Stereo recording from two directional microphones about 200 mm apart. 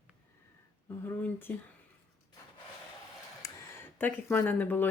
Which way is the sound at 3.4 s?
15° left (ahead or behind).